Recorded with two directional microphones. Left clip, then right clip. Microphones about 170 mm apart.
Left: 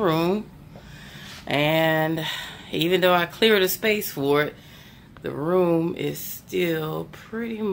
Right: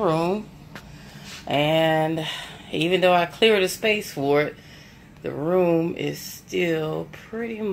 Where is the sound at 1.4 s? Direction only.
10° left (ahead or behind).